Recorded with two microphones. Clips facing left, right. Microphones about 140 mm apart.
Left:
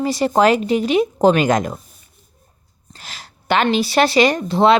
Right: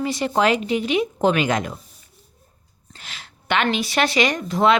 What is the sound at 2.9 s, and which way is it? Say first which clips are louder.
Speech: left 3 dB; 40° left (ahead or behind).